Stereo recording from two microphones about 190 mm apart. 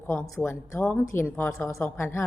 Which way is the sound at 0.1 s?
5° left (ahead or behind).